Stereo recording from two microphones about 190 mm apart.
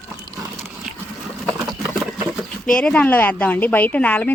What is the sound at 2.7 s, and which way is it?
Speech, 5° left (ahead or behind).